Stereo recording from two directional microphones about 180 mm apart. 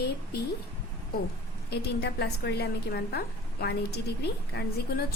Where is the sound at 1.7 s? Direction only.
65° left (ahead or behind).